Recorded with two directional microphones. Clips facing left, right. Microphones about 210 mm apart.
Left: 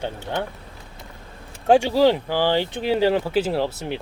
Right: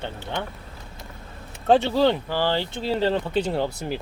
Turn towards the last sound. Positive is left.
turn(degrees=0)  # may be behind; listen again after turning